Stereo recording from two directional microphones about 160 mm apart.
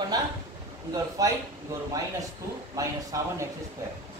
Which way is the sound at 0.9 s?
20° right (ahead or behind).